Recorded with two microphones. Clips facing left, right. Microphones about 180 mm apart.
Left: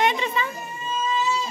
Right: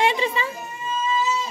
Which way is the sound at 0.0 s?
30° right (ahead or behind).